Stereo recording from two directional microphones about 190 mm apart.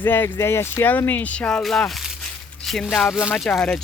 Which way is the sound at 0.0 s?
10° left (ahead or behind).